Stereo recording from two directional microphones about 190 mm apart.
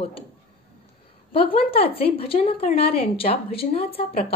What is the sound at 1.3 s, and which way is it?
A woman's voice, 30° left (ahead or behind).